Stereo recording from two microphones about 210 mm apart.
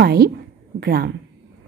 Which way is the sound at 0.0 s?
50° right (ahead or behind).